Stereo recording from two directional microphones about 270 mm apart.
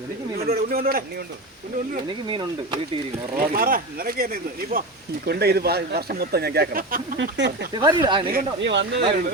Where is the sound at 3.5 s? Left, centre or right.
Right.